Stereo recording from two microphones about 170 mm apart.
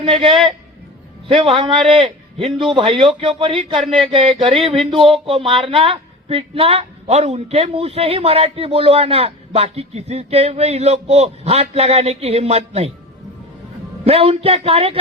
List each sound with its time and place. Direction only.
0.0 s speech: 30° right (ahead or behind)
14.0 s speech: 35° right (ahead or behind)